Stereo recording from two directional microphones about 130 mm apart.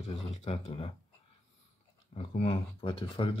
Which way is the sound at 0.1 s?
50° left (ahead or behind).